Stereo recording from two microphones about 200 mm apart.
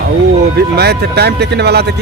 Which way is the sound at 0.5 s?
55° right (ahead or behind).